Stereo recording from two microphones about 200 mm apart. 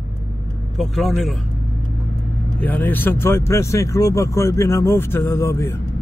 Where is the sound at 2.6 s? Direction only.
10° left (ahead or behind).